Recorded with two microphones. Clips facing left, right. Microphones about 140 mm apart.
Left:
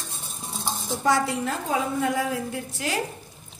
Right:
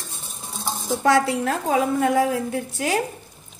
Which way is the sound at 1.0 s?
75° right (ahead or behind).